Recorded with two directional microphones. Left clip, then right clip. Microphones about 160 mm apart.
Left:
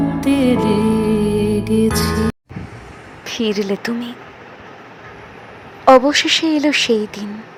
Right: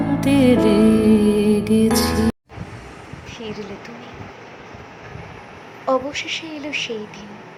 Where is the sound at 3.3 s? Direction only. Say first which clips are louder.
Left 13 dB; 85° left.